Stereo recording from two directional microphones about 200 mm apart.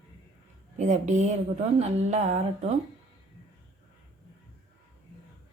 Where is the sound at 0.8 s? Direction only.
35° right (ahead or behind).